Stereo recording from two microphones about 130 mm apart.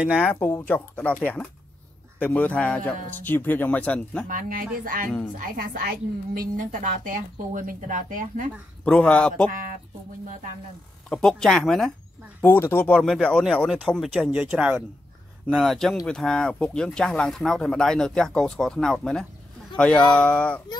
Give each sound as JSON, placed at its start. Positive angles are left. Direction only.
{"t": 0.2, "sound": "speech", "side_deg": 15}
{"t": 4.3, "sound": "speech", "side_deg": -90}
{"t": 8.8, "sound": "speech", "side_deg": 5}
{"t": 9.5, "sound": "speech", "side_deg": -90}
{"t": 11.1, "sound": "speech", "side_deg": 5}
{"t": 12.4, "sound": "speech", "side_deg": 15}
{"t": 14.5, "sound": "speech", "side_deg": -10}